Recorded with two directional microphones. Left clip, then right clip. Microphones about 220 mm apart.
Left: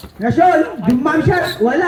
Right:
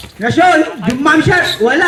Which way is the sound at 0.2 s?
45° right (ahead or behind).